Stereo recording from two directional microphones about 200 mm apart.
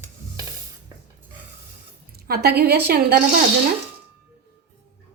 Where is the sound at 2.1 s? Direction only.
50° right (ahead or behind).